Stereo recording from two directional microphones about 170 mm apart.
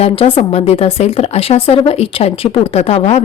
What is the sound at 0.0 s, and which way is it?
Speech, 35° left (ahead or behind).